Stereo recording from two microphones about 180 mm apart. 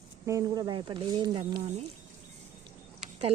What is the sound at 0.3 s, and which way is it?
Speech, 20° right (ahead or behind).